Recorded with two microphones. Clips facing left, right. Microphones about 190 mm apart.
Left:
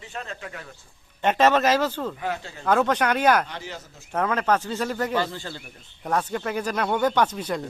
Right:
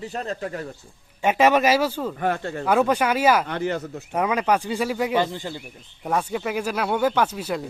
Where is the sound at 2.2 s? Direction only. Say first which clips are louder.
Right 6 dB; 55° right (ahead or behind).